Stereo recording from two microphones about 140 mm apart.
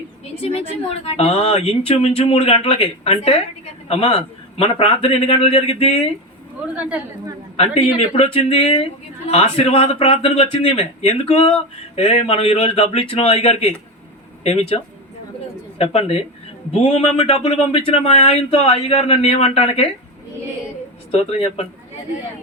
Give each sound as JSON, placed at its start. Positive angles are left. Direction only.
{"t": 1.0, "sound": "speech", "side_deg": 45}
{"t": 7.5, "sound": "speech", "side_deg": 50}
{"t": 15.8, "sound": "speech", "side_deg": 45}
{"t": 21.1, "sound": "speech", "side_deg": 45}